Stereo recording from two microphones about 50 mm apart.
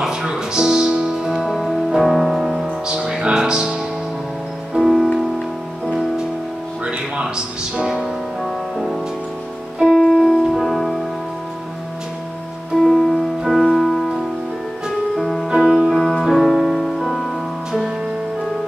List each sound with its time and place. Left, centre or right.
0.0 s music: centre
4.7 s music: centre
6.9 s music: centre
9.9 s music: centre
12.8 s music: centre
15.5 s music: centre